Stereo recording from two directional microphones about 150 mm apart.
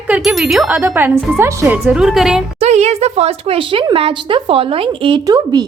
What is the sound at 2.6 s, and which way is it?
Speech, 45° right (ahead or behind).